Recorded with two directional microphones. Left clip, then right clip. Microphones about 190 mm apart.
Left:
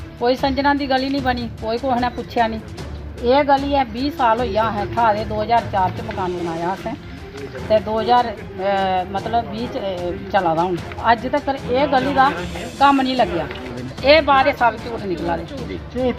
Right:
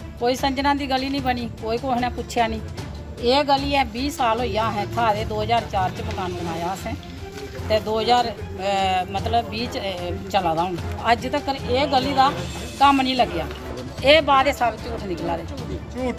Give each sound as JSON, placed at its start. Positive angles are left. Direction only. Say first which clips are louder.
{"t": 0.2, "sound": "speech", "louder": "left 4 dB", "side_deg": -10}
{"t": 7.7, "sound": "speech", "louder": "left 3 dB", "side_deg": -10}